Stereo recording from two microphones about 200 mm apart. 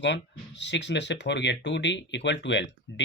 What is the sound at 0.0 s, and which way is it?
Speech, 60° left (ahead or behind).